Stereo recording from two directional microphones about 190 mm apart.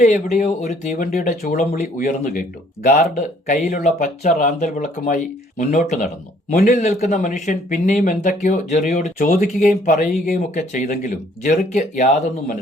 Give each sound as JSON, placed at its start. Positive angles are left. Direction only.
{"t": 0.0, "sound": "a man's voice", "side_deg": 40}